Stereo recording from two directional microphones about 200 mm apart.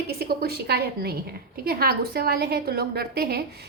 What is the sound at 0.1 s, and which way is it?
A woman's voice, 50° right (ahead or behind).